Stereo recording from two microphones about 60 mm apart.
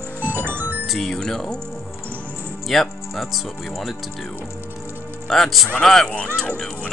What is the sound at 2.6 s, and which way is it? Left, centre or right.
Speech, centre.